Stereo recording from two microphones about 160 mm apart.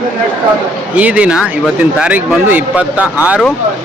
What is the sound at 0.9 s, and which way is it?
Speech, 10° right (ahead or behind).